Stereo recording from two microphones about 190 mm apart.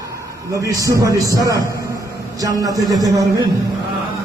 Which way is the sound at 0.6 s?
15° right (ahead or behind).